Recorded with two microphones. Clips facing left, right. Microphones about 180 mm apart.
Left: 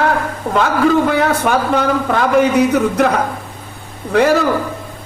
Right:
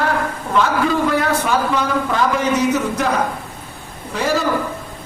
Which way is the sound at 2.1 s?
60° left (ahead or behind).